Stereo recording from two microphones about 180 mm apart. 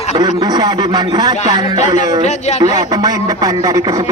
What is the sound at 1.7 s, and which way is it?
Snicker, 40° left (ahead or behind).